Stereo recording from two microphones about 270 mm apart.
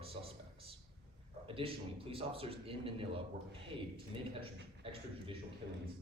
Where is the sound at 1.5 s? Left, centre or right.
Centre.